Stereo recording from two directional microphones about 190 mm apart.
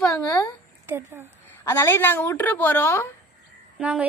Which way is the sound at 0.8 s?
10° right (ahead or behind).